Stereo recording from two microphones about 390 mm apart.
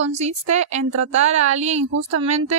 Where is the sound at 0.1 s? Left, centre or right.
Centre.